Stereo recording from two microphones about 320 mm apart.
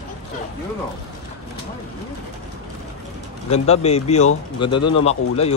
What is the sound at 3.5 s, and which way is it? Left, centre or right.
Speech, centre.